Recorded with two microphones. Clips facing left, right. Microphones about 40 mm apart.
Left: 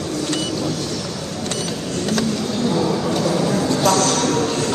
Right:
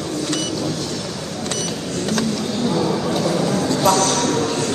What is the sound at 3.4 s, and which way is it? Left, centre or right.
Vehicle, left.